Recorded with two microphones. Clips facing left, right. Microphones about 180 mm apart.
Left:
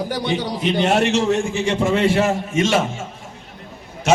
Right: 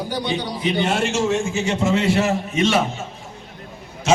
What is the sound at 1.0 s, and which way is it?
Speech, 65° left (ahead or behind).